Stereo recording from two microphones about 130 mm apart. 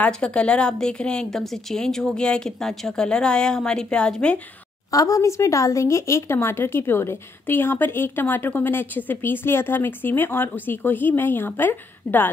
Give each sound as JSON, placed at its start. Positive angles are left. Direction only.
{"t": 0.0, "sound": "a woman's voice", "side_deg": 10}
{"t": 4.9, "sound": "a woman's voice", "side_deg": 25}